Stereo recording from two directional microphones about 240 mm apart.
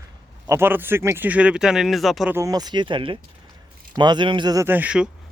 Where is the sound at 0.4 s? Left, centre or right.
Centre.